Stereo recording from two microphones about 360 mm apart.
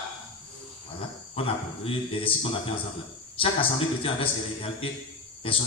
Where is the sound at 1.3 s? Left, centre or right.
Centre.